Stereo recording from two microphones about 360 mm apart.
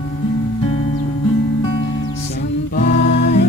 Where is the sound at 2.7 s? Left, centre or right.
Left.